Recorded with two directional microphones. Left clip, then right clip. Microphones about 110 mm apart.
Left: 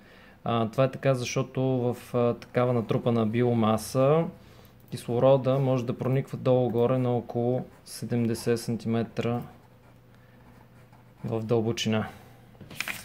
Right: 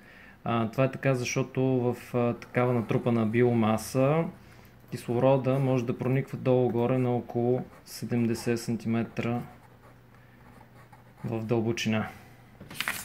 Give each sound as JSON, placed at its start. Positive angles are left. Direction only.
{"t": 0.4, "sound": "speech", "side_deg": 25}
{"t": 1.4, "sound": "speech", "side_deg": 25}
{"t": 1.9, "sound": "speech", "side_deg": 15}
{"t": 7.9, "sound": "speech", "side_deg": 20}
{"t": 11.2, "sound": "speech", "side_deg": 20}